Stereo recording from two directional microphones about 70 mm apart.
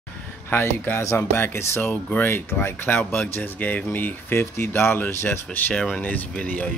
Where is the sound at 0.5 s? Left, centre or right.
Left.